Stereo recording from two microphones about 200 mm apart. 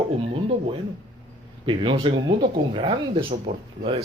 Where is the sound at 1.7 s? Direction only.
25° right (ahead or behind).